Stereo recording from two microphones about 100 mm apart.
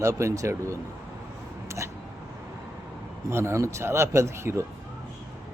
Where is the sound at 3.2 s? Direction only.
30° right (ahead or behind).